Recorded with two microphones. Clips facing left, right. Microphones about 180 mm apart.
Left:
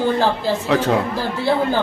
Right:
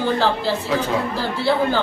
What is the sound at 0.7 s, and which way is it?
Speech, 70° left (ahead or behind).